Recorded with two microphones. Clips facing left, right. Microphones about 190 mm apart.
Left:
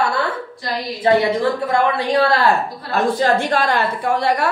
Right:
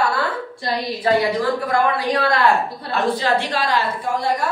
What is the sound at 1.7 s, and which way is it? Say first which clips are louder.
Speech: left 1 dB; 30° left (ahead or behind).